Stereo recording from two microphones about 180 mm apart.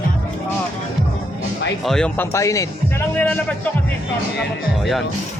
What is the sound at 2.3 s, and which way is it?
Speech, 15° left (ahead or behind).